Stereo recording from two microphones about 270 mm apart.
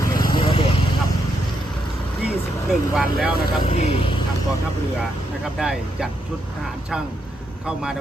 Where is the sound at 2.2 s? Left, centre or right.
Centre.